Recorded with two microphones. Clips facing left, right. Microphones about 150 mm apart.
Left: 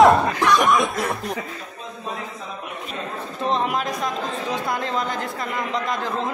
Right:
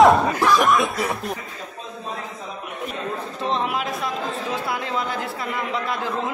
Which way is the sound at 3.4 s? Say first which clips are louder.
Left 2 dB; centre (ahead or behind).